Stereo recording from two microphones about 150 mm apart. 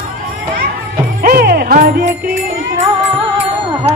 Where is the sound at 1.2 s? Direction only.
85° right.